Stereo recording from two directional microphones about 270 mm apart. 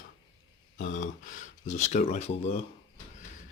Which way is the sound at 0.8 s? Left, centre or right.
Left.